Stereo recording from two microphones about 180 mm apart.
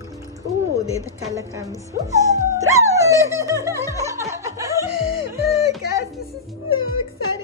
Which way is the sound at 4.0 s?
15° right (ahead or behind).